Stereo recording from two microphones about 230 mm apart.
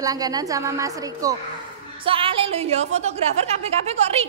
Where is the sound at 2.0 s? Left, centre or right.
Right.